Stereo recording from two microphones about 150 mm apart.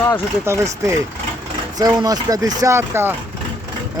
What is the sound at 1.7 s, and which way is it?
Speech, 25° right (ahead or behind).